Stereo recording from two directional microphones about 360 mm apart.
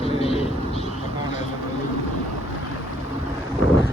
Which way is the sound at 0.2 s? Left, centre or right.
Centre.